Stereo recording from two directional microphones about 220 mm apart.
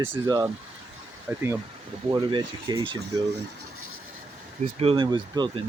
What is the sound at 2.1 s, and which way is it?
Speech, 20° right (ahead or behind).